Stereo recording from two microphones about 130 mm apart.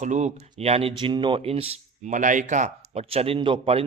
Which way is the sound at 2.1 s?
75° right (ahead or behind).